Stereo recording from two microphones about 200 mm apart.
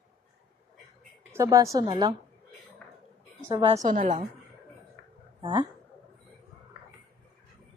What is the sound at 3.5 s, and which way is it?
Speech, 20° right (ahead or behind).